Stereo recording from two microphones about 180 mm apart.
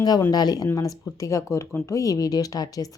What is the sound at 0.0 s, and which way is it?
Speech, 20° left (ahead or behind).